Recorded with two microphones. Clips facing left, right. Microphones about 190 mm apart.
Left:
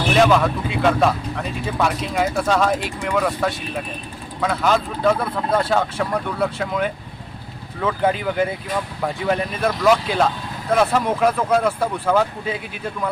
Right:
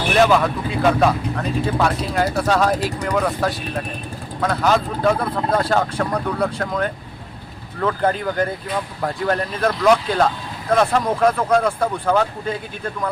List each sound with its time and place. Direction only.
0.2 s speech: centre (ahead or behind)
2.8 s speech: 40° right (ahead or behind)
3.2 s speech: centre (ahead or behind)